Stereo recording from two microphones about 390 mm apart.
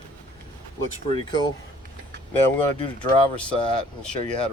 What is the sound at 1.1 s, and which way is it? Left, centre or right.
Speech, centre.